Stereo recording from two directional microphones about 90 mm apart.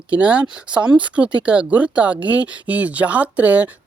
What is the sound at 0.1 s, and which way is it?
Speech, 15° right (ahead or behind).